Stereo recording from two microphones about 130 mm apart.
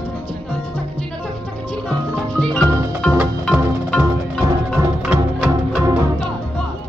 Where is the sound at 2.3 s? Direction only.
5° left (ahead or behind).